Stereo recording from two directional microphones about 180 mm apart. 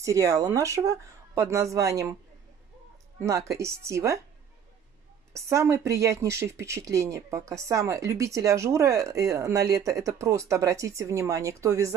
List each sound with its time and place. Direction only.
0.0 s speech: 20° right (ahead or behind)
3.2 s speech: 15° right (ahead or behind)
5.3 s speech: 15° right (ahead or behind)